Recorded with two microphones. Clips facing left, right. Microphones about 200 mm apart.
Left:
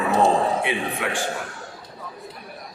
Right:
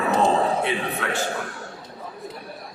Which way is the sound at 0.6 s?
15° left (ahead or behind).